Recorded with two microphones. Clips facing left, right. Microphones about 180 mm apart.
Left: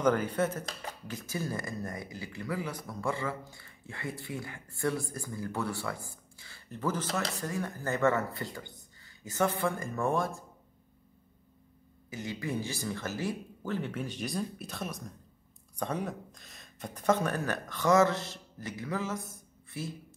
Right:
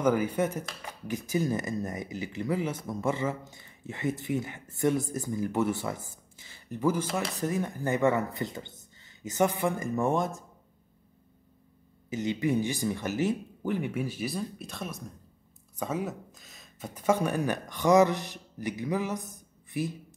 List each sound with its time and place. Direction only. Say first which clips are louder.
0.0 s speech: right 2 dB; 10° right (ahead or behind)
12.1 s speech: right 8 dB; 20° right (ahead or behind)